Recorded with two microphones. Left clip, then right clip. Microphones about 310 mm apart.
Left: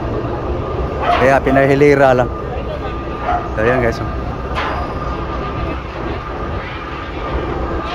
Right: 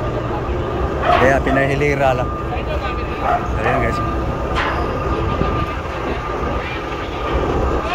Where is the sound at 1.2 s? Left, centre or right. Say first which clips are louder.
Left 3 dB; centre.